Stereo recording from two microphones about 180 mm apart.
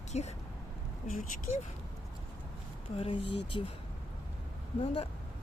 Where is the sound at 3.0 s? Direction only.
30° left (ahead or behind).